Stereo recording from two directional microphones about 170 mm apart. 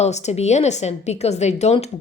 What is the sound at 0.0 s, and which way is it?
A woman's voice, 40° left (ahead or behind).